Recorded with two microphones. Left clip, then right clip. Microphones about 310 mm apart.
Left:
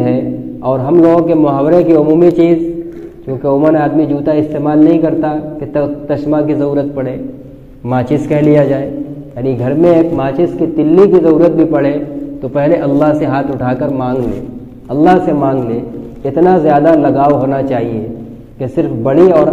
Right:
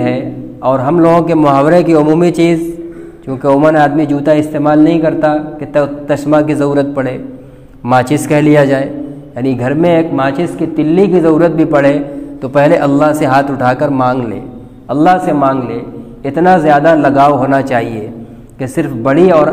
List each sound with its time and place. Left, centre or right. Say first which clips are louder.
0.7 s a man's voice: even; right